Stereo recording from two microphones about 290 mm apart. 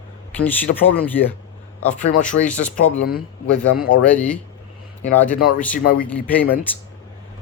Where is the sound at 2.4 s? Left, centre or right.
Centre.